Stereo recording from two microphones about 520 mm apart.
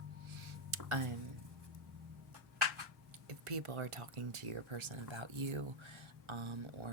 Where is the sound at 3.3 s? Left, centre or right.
Right.